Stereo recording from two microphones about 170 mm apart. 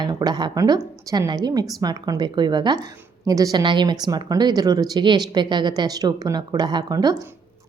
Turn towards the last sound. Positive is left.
turn(degrees=-25)  # may be behind; listen again after turning